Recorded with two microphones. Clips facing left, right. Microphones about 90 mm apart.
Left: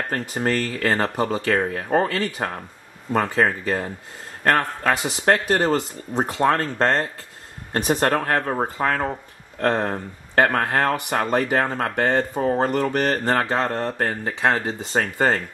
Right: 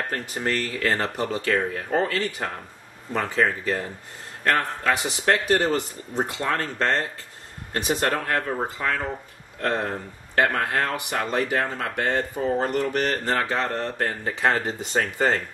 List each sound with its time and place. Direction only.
0.1 s speech: 45° left (ahead or behind)
1.3 s speech: 30° left (ahead or behind)
3.1 s speech: 45° left (ahead or behind)
4.8 s speech: 45° left (ahead or behind)
7.7 s speech: 45° left (ahead or behind)
13.4 s speech: 30° left (ahead or behind)